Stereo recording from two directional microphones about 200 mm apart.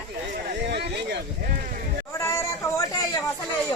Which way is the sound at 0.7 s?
55° right (ahead or behind).